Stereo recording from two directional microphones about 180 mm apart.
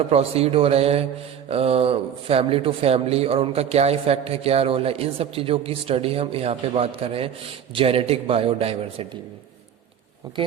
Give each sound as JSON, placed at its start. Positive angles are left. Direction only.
{"t": 0.1, "sound": "speech", "side_deg": -35}